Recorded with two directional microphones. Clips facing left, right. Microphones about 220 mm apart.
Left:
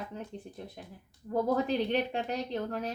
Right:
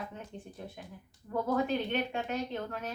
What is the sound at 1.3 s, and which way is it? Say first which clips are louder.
Speech: left 2 dB; 35° left (ahead or behind).